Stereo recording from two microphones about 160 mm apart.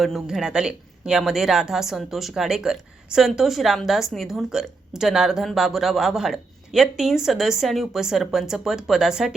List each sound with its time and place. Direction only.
0.0 s speech: centre (ahead or behind)